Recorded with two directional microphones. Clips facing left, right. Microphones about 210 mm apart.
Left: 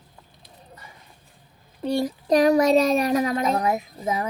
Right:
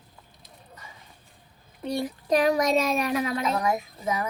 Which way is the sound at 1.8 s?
35° left (ahead or behind).